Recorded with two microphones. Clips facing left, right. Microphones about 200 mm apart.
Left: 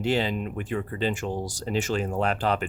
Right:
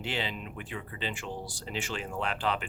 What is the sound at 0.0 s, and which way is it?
Speech, 40° left (ahead or behind).